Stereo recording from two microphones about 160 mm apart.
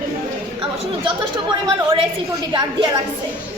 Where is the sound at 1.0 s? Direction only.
30° right (ahead or behind).